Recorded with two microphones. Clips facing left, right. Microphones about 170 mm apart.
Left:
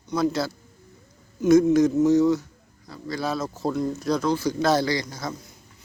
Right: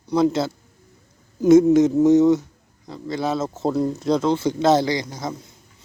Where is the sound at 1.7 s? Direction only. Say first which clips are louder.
Right 3 dB; 20° right (ahead or behind).